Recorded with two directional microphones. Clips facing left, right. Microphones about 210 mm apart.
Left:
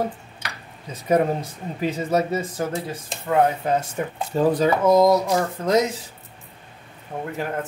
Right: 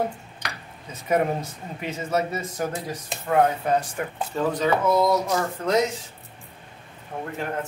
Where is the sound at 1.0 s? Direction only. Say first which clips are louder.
Left 3 dB; 35° left (ahead or behind).